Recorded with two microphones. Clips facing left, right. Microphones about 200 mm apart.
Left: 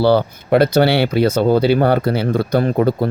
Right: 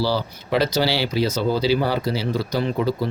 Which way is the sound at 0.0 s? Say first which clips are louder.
Left 9 dB; 60° left (ahead or behind).